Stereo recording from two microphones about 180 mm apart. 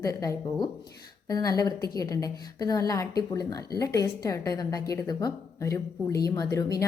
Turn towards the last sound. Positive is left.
turn(degrees=20)  # may be behind; listen again after turning